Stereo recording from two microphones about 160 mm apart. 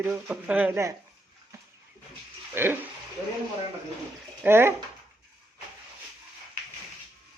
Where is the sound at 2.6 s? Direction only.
15° right (ahead or behind).